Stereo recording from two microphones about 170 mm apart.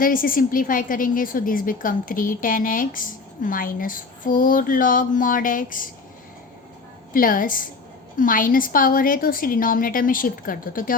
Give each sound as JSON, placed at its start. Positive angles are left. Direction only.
{"t": 0.0, "sound": "a woman's voice", "side_deg": 55}
{"t": 7.1, "sound": "a woman's voice", "side_deg": 55}